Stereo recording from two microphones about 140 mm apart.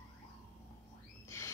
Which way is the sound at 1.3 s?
20° left (ahead or behind).